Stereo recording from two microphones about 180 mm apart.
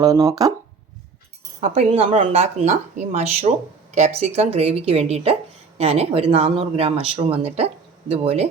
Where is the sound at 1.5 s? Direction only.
35° right (ahead or behind).